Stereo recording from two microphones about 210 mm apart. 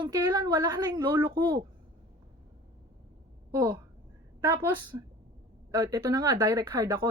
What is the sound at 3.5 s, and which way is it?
Speech, 15° right (ahead or behind).